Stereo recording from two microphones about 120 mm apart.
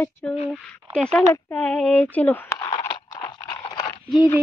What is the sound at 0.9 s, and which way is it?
Speech, 5° left (ahead or behind).